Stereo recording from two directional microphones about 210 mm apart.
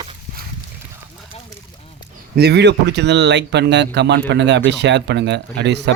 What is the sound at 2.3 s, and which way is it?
Speech, 50° right (ahead or behind).